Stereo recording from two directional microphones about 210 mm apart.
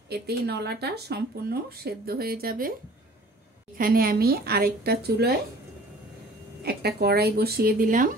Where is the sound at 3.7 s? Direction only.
45° right (ahead or behind).